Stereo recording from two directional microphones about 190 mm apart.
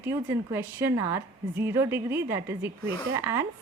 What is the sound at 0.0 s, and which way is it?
A woman's voice, 15° right (ahead or behind).